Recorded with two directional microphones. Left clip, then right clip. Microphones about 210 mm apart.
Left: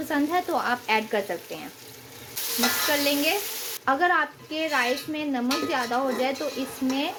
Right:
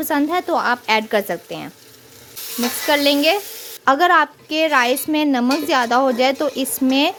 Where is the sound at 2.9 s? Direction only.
45° right (ahead or behind).